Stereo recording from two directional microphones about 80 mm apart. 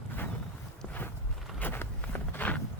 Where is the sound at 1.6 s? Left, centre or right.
Left.